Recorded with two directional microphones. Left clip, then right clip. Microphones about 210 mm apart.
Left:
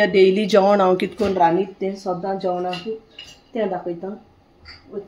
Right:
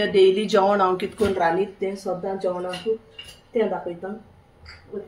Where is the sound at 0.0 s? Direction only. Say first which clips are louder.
Left 2 dB; 35° left (ahead or behind).